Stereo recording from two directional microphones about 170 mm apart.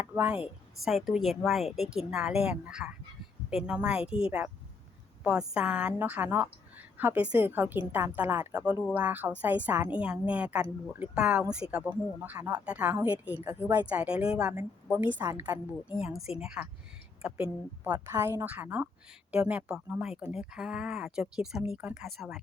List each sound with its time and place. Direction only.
0.0 s a woman's voice: 10° right (ahead or behind)
5.5 s a woman's voice: 5° right (ahead or behind)
13.4 s a woman's voice: 20° right (ahead or behind); by 22.4 s centre (ahead or behind)